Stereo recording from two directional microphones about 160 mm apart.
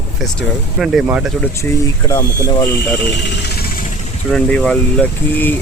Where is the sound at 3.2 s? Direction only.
85° left.